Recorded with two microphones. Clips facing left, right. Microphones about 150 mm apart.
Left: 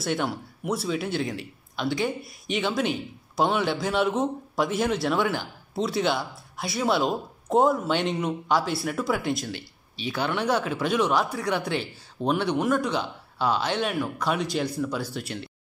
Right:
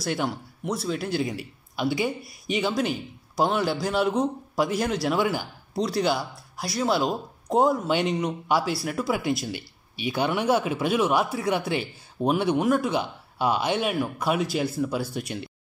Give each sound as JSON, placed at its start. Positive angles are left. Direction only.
{"t": 0.0, "sound": "a man's voice", "side_deg": 0}